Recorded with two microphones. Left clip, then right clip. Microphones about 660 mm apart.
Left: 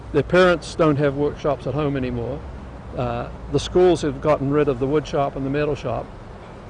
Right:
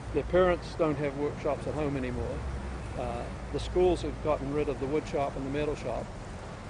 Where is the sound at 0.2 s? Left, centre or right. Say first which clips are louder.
Left 9 dB; left.